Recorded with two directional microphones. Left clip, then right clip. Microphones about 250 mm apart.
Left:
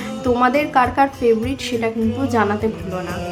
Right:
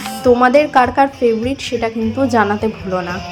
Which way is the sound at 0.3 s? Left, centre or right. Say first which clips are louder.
Right 3 dB; centre.